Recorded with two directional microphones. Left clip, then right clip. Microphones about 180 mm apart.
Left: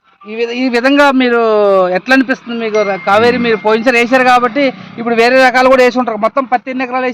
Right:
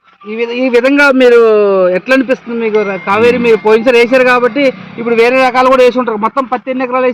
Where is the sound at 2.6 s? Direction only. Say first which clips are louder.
Left 2 dB; 55° left (ahead or behind).